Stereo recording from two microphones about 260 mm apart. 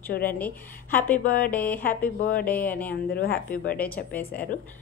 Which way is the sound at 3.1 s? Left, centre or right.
Left.